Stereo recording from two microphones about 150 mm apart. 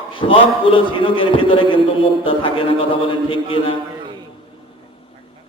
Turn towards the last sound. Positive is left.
turn(degrees=35)  # may be behind; listen again after turning